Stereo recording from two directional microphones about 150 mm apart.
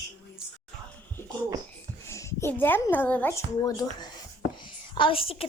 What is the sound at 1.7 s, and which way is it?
A woman's voice, 20° left (ahead or behind).